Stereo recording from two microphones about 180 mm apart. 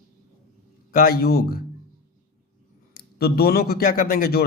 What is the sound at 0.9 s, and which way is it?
Speech, 55° left (ahead or behind).